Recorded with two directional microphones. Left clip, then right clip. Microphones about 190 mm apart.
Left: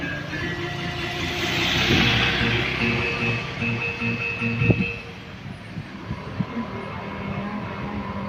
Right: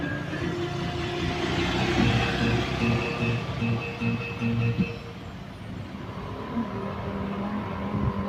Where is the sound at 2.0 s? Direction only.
20° right (ahead or behind).